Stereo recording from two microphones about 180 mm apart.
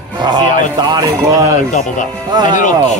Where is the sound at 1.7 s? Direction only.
45° left (ahead or behind).